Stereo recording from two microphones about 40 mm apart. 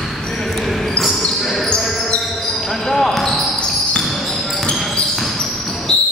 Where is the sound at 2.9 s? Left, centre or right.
Centre.